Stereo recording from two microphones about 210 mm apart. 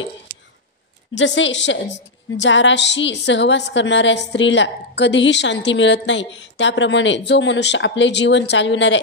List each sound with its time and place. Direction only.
1.1 s a woman's voice: 60° left (ahead or behind)